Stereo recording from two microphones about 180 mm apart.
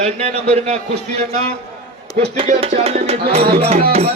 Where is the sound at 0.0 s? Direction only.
35° right (ahead or behind).